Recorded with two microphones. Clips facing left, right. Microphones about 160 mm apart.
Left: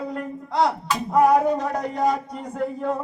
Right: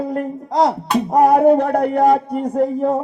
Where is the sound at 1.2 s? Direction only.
50° right (ahead or behind).